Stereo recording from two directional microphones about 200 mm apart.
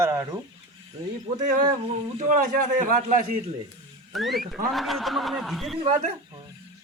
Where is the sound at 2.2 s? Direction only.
40° right (ahead or behind).